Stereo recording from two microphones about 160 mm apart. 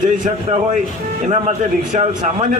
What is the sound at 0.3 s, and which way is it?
A man's voice, 50° right (ahead or behind).